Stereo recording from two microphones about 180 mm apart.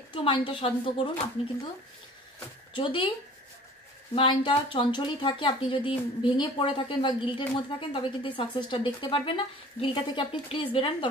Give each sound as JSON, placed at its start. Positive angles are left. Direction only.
{"t": 0.1, "sound": "a woman's voice", "side_deg": 30}
{"t": 2.7, "sound": "a woman's voice", "side_deg": 30}
{"t": 4.1, "sound": "a woman's voice", "side_deg": 30}